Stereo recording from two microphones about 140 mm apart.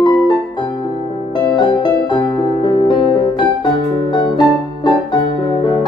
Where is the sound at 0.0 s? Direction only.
30° left (ahead or behind).